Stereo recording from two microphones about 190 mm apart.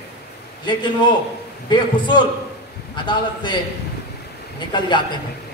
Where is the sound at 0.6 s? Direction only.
25° left (ahead or behind).